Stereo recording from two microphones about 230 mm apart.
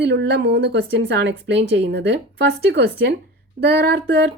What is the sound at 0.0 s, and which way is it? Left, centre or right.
Speech, right.